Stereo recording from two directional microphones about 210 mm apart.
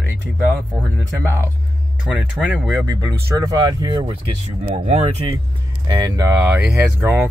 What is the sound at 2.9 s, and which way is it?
Speech, 20° right (ahead or behind).